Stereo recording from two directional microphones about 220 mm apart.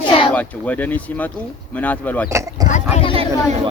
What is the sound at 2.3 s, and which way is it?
Speech, 15° right (ahead or behind).